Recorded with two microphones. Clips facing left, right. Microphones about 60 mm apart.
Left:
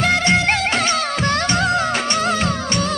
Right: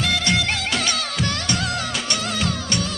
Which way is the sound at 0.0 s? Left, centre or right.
Left.